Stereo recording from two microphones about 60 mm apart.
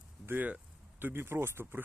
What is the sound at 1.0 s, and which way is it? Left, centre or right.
Speech, right.